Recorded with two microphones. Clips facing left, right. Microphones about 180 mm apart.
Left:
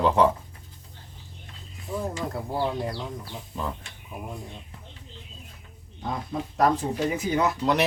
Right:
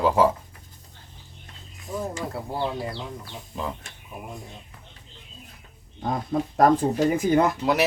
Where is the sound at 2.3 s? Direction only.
5° right (ahead or behind).